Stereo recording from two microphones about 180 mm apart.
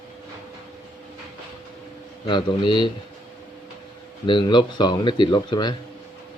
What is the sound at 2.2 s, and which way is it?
Speech, 25° left (ahead or behind).